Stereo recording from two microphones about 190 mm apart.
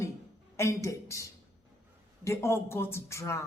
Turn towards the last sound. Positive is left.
turn(degrees=15)  # may be behind; listen again after turning